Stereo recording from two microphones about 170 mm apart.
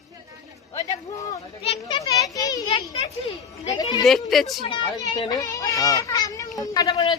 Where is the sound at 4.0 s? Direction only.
Centre (ahead or behind).